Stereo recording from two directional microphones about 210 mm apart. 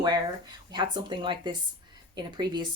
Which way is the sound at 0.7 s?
20° right (ahead or behind).